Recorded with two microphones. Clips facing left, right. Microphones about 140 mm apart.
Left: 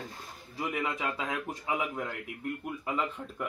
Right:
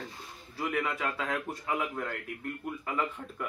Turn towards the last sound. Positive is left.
turn(degrees=15)  # may be behind; listen again after turning